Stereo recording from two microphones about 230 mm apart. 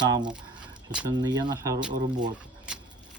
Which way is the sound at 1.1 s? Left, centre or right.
Centre.